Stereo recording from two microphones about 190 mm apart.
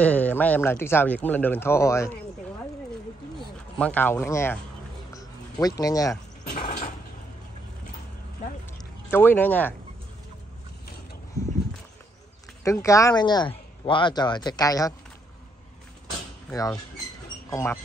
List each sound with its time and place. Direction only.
0.0 s speech: 10° left (ahead or behind)
3.7 s speech: 10° left (ahead or behind)
5.1 s a sound: 20° left (ahead or behind)
6.5 s mechanisms: 30° left (ahead or behind)
9.1 s speech: 10° left (ahead or behind)
12.6 s speech: 15° left (ahead or behind)
16.4 s speech: 20° left (ahead or behind)